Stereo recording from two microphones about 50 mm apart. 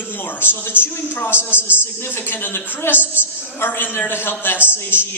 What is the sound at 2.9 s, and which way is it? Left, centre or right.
Speech, right.